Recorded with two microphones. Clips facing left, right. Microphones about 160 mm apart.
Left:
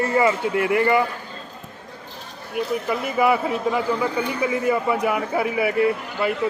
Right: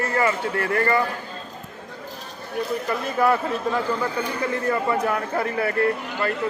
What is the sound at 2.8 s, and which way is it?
Speech, 10° left (ahead or behind).